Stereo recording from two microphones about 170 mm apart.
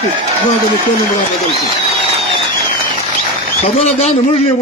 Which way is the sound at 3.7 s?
40° left (ahead or behind).